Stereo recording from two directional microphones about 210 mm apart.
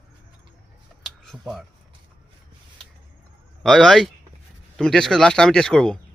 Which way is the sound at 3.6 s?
Centre (ahead or behind).